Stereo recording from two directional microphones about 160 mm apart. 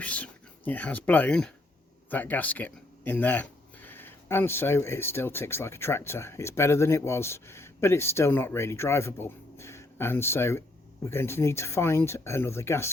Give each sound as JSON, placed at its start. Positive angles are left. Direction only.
{"t": 0.0, "sound": "speech", "side_deg": 10}